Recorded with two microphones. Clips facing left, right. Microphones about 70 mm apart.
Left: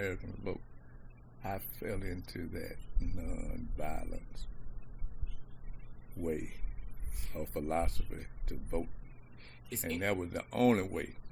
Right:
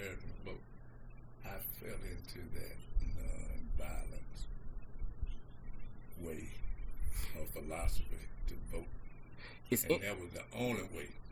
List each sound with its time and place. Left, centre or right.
0.0 s speech: left
6.1 s speech: left
9.4 s a sound: right
10.0 s speech: left